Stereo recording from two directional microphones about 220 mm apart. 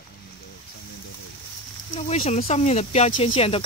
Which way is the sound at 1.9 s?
25° left (ahead or behind).